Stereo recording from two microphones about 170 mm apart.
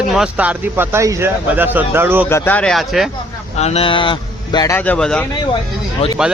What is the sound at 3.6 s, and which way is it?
Speech, 30° left (ahead or behind).